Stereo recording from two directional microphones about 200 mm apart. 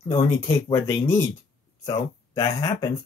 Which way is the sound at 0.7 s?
10° left (ahead or behind).